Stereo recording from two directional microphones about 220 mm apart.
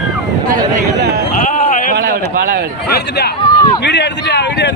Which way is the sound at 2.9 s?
45° left (ahead or behind).